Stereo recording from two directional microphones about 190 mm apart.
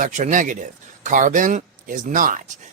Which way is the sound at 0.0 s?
40° right (ahead or behind).